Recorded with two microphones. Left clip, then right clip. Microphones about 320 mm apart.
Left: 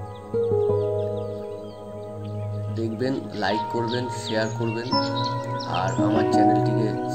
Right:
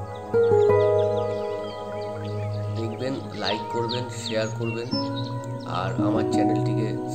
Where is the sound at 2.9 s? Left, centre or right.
Centre.